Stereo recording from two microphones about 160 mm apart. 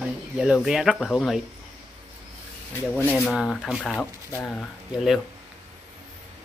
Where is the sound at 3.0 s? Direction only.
15° left (ahead or behind).